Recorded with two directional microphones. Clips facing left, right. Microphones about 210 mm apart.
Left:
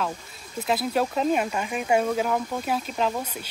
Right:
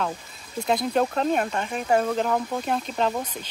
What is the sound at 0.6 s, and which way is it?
Speech, 5° left (ahead or behind).